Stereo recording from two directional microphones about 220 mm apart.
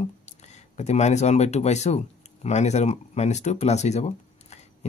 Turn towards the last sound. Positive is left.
turn(degrees=30)  # may be behind; listen again after turning